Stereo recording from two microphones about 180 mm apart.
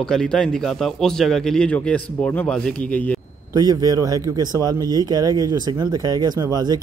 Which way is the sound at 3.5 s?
20° right (ahead or behind).